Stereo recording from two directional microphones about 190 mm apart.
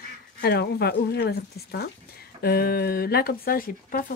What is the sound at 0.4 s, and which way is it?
Speech, 55° left (ahead or behind).